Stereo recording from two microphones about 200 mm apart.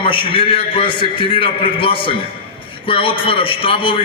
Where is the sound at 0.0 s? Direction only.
25° left (ahead or behind).